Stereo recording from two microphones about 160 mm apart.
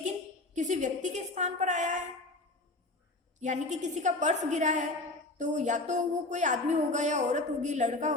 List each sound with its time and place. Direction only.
0.5 s a woman's voice: 50° right (ahead or behind)
3.4 s a woman's voice: 50° right (ahead or behind)